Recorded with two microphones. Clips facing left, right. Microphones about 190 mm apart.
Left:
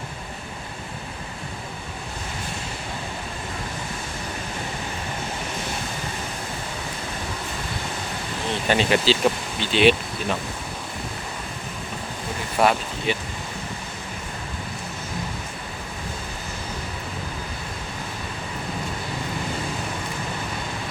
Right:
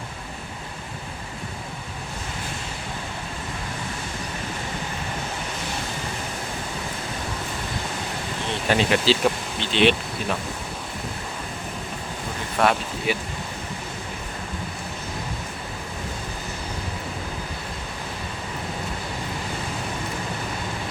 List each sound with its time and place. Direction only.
8.6 s speech: centre (ahead or behind)
12.6 s speech: 10° left (ahead or behind)
13.1 s speech: 10° right (ahead or behind)